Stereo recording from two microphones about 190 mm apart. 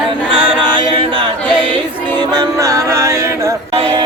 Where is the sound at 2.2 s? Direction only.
20° right (ahead or behind).